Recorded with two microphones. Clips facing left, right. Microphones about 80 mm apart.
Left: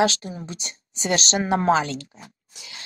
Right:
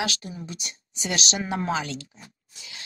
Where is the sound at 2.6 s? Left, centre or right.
Left.